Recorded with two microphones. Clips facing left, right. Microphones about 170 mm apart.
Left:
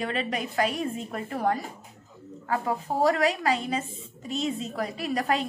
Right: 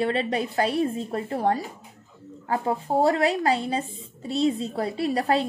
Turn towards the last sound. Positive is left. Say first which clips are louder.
# right 4 dB
turn(degrees=-30)  # may be behind; listen again after turning